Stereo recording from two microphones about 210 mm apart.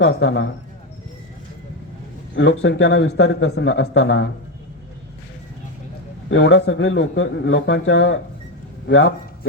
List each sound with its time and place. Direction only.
0.0 s a man's voice: 55° left (ahead or behind)
2.3 s a man's voice: 55° left (ahead or behind)
6.2 s a man's voice: 60° left (ahead or behind)